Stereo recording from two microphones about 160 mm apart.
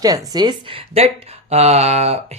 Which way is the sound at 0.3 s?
30° right (ahead or behind).